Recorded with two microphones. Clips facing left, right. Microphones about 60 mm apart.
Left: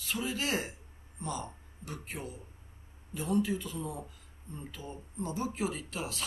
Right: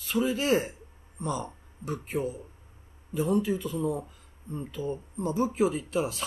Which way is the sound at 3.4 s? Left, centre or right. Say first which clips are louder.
Right 7 dB; centre.